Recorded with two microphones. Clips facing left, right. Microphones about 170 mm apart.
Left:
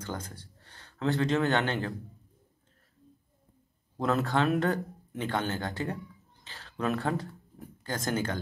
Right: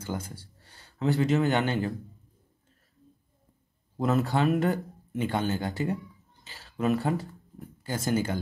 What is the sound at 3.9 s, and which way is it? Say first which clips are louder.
Speech: right 2 dB; 5° right (ahead or behind).